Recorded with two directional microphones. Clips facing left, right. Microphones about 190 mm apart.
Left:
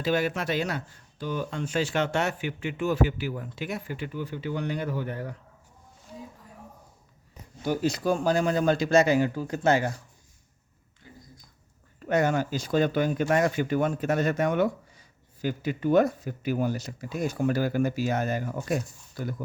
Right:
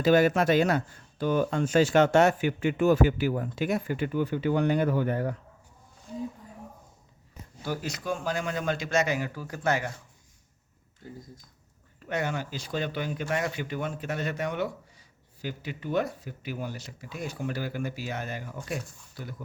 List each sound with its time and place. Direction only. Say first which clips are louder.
0.0 s speech: right 5 dB; 45° right (ahead or behind)
7.6 s speech: left 7 dB; 25° left (ahead or behind)
12.0 s speech: left 7 dB; 45° left (ahead or behind)